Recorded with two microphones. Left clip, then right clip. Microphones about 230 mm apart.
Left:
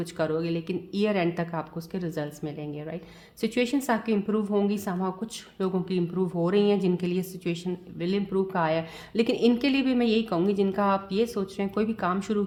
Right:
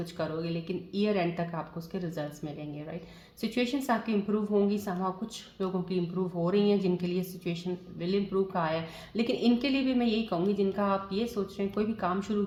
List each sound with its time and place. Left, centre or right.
0.0 s speech: left